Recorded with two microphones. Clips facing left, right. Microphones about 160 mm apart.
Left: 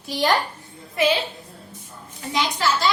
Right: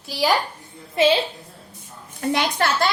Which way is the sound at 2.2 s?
60° right (ahead or behind).